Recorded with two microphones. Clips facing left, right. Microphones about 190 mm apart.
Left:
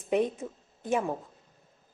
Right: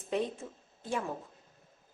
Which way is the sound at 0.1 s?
20° left (ahead or behind).